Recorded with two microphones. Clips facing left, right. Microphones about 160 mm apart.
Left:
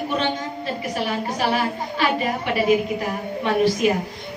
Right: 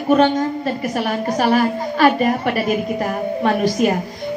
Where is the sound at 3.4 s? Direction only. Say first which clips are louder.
Right 1 dB; 45° right (ahead or behind).